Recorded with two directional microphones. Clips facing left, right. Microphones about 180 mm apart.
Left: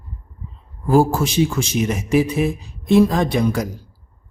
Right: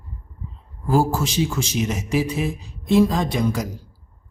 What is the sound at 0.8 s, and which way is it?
Speech, 55° left (ahead or behind).